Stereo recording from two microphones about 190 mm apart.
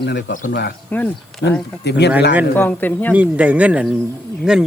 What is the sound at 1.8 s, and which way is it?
Speech, 60° left (ahead or behind).